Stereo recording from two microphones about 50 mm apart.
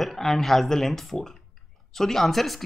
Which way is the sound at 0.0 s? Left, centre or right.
Centre.